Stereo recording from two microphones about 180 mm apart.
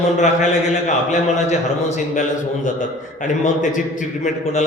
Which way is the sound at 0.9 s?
40° left (ahead or behind).